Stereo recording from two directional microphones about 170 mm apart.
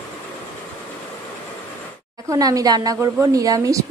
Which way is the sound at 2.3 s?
20° right (ahead or behind).